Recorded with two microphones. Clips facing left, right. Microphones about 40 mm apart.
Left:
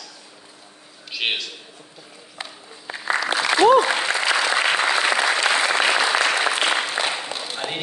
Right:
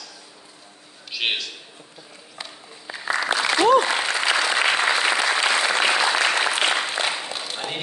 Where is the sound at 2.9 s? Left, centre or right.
Left.